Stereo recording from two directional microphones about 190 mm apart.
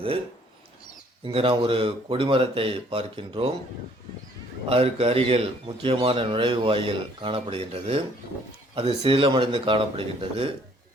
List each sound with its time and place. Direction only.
1.2 s a man's voice: 30° right (ahead or behind)
4.7 s a man's voice: 30° right (ahead or behind)